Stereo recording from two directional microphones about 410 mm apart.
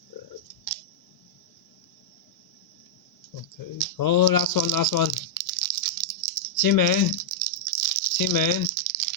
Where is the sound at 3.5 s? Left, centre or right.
Left.